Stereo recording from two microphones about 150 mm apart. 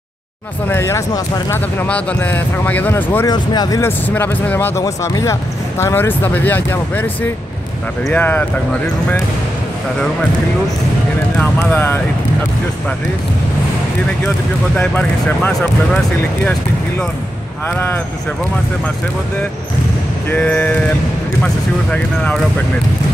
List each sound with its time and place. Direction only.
0.7 s a man's voice: 15° left (ahead or behind)
3.3 s speech: 25° left (ahead or behind)
4.1 s a man's voice: 10° left (ahead or behind)
8.1 s a man's voice: 10° left (ahead or behind)
11.6 s a man's voice: 15° left (ahead or behind)
14.8 s a man's voice: 10° left (ahead or behind)
20.2 s a man's voice: 10° left (ahead or behind)
21.9 s a man's voice: 5° left (ahead or behind)